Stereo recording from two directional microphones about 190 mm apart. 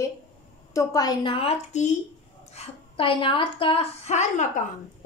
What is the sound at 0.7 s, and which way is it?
A woman's voice, 20° left (ahead or behind).